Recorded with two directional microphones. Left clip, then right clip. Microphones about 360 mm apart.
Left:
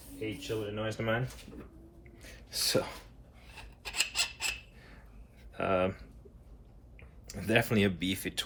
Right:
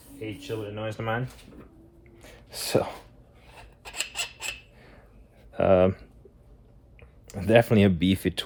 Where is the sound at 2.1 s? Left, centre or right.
Centre.